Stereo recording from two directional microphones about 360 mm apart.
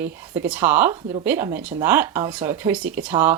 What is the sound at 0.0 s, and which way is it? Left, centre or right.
Speech, centre.